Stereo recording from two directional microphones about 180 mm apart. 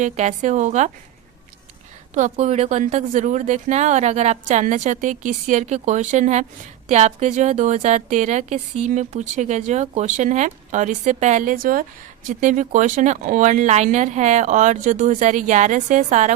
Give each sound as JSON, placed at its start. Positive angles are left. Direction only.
{"t": 0.0, "sound": "a woman's voice", "side_deg": -40}
{"t": 2.1, "sound": "a woman's voice", "side_deg": -40}